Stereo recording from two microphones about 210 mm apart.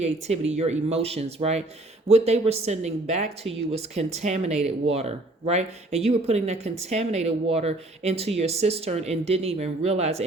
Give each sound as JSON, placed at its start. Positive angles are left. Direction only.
{"t": 0.0, "sound": "speech", "side_deg": -30}